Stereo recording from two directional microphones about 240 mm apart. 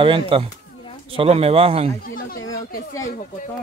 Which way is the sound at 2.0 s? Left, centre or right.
Left.